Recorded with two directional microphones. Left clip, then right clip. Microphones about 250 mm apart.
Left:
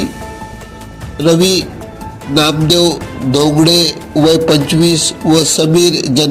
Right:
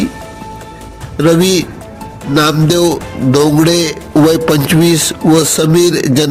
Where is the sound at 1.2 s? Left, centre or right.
Right.